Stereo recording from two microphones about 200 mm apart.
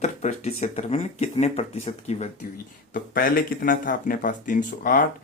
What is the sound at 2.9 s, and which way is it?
Speech, 45° left (ahead or behind).